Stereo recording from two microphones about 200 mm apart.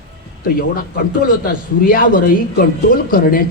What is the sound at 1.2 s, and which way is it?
Speech, 45° left (ahead or behind).